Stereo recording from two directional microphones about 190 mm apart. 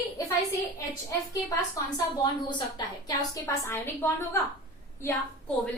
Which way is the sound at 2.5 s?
20° left (ahead or behind).